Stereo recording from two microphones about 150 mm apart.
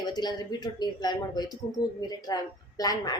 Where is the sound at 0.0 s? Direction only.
30° left (ahead or behind).